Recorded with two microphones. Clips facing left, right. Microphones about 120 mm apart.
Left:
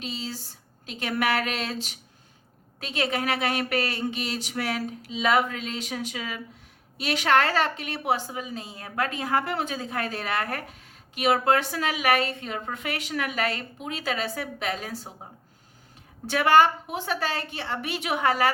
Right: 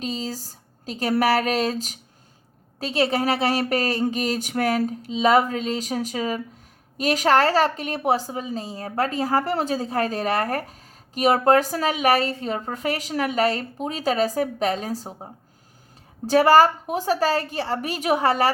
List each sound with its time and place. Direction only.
0.0 s a woman's voice: 40° right (ahead or behind)
5.0 s a woman's voice: 30° right (ahead or behind)